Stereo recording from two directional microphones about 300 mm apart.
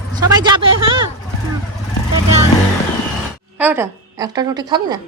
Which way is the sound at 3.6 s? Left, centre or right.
Centre.